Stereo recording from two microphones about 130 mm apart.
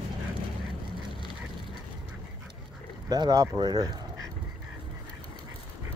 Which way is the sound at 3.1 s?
30° right (ahead or behind).